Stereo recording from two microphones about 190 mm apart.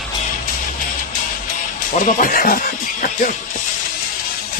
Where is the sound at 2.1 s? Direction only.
45° left (ahead or behind).